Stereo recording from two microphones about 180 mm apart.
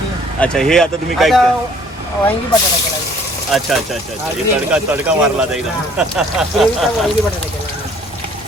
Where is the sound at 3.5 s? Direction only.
Centre (ahead or behind).